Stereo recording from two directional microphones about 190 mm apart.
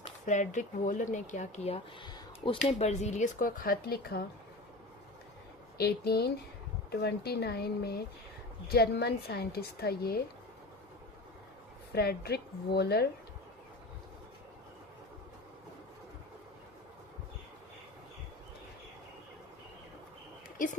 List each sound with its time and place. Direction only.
0.3 s speech: 40° left (ahead or behind)
5.7 s a woman's voice: 55° left (ahead or behind)
11.9 s a woman's voice: 55° left (ahead or behind)
20.6 s a woman's voice: 45° left (ahead or behind)